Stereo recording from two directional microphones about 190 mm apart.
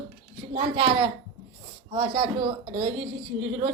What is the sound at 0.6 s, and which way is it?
A woman's voice, 30° right (ahead or behind).